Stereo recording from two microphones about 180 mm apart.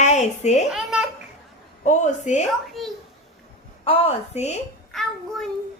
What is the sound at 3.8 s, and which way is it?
Speech, 35° left (ahead or behind).